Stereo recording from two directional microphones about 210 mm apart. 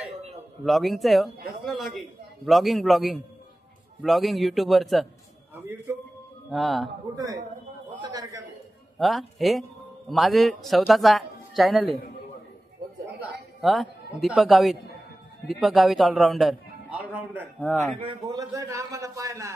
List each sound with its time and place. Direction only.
0.7 s a man's voice: centre (ahead or behind)
5.5 s a man's voice: 10° right (ahead or behind)
6.5 s a man's voice: centre (ahead or behind)
7.2 s a man's voice: 15° right (ahead or behind)
8.0 s a sound: 15° right (ahead or behind)
8.9 s a man's voice: centre (ahead or behind)
13.0 s a sound: 5° right (ahead or behind)
15.4 s a man's voice: centre (ahead or behind)
17.9 s a man's voice: 20° right (ahead or behind)